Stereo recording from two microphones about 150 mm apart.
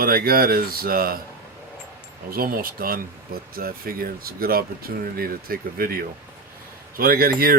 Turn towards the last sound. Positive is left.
turn(degrees=-80)